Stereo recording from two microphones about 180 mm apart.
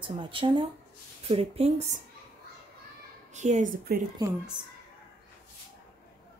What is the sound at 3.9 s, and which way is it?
Speech, 60° right (ahead or behind).